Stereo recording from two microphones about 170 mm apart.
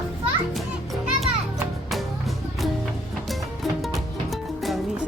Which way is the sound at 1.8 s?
Centre (ahead or behind).